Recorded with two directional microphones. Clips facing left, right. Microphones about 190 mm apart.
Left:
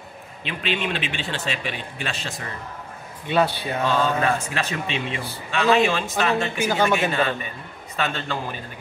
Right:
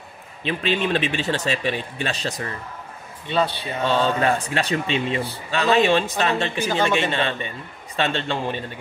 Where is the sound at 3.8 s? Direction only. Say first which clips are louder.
Right 2 dB; 30° right (ahead or behind).